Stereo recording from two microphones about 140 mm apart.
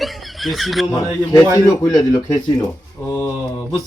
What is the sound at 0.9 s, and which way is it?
A man's voice, 25° left (ahead or behind).